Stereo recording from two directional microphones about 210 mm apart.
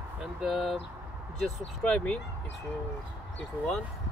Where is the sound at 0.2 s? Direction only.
5° right (ahead or behind).